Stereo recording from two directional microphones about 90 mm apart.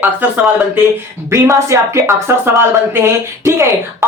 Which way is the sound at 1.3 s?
35° right (ahead or behind).